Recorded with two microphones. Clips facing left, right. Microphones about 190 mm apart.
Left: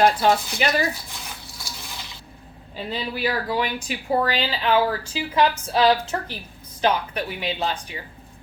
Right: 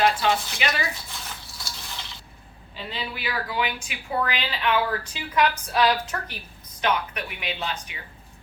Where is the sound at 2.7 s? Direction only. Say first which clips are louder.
Left 5 dB; 40° left (ahead or behind).